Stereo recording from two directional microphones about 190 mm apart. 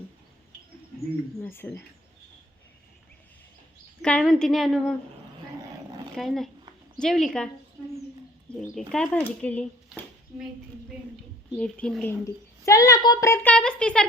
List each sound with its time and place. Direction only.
1.4 s a child's voice: 10° left (ahead or behind)
4.0 s a woman's voice: 5° left (ahead or behind)
6.1 s a woman's voice: centre (ahead or behind)
10.3 s a woman's voice: 5° right (ahead or behind)
11.5 s a woman's voice: 5° left (ahead or behind)
12.2 s a child's voice: 15° left (ahead or behind)